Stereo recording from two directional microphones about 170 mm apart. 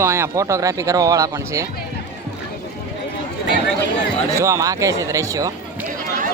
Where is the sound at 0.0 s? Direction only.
15° right (ahead or behind).